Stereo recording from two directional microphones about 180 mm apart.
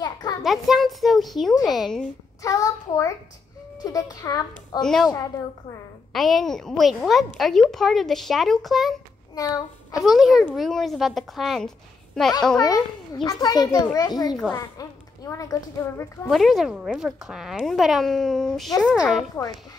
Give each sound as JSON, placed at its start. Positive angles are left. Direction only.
{"t": 0.0, "sound": "a sound", "side_deg": 25}
{"t": 0.4, "sound": "a child's voice", "side_deg": 0}
{"t": 2.4, "sound": "a child's voice", "side_deg": 20}
{"t": 4.8, "sound": "a child's voice", "side_deg": 0}
{"t": 6.1, "sound": "a child's voice", "side_deg": 0}
{"t": 9.3, "sound": "a child's voice", "side_deg": 20}
{"t": 9.9, "sound": "a child's voice", "side_deg": 0}
{"t": 12.5, "sound": "a child's voice", "side_deg": 20}
{"t": 16.3, "sound": "a child's voice", "side_deg": 0}